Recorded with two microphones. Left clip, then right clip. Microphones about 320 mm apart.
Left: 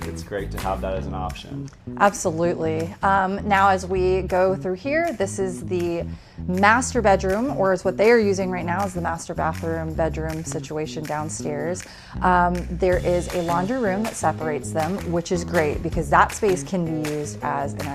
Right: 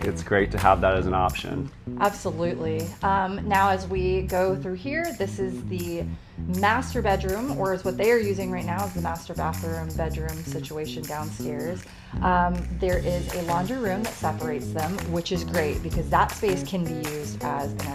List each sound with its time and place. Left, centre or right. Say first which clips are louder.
0.3 s speech: right 8 dB; right
2.0 s speech: left 5 dB; left
6.6 s speech: left 6 dB; left